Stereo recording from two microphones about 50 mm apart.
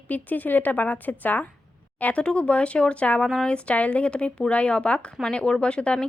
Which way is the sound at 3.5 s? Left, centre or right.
Left.